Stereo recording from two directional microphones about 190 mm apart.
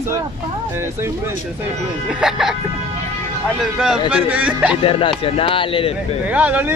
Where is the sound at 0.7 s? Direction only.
15° right (ahead or behind).